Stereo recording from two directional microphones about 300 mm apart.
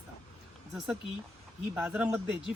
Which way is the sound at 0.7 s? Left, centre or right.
Centre.